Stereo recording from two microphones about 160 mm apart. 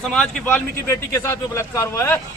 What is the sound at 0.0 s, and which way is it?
Speech, 5° left (ahead or behind).